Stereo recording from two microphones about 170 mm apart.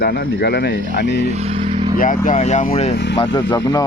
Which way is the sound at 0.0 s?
75° left (ahead or behind).